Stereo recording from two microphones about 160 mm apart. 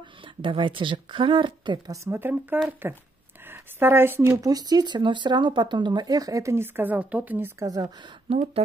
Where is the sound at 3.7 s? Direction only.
15° right (ahead or behind).